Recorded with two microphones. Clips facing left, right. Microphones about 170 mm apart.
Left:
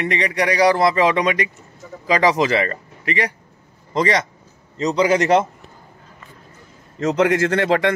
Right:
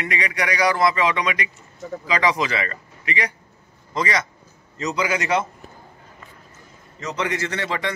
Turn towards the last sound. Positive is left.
turn(degrees=50)  # may be behind; listen again after turning